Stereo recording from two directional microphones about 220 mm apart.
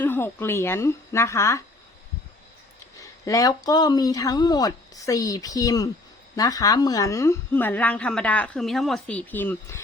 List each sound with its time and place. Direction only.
0.0 s a woman's voice: 10° left (ahead or behind)
3.0 s a woman's voice: 15° left (ahead or behind)